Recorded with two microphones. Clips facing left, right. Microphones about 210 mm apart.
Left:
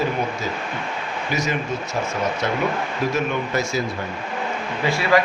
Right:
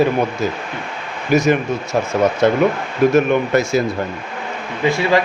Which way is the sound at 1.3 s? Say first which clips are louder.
Right 10 dB; 55° right (ahead or behind).